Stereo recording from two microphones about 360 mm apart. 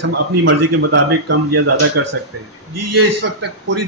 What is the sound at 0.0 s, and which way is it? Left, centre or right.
A man's voice, right.